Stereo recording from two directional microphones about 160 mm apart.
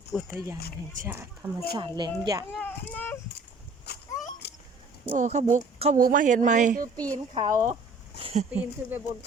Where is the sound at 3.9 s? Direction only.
90° left.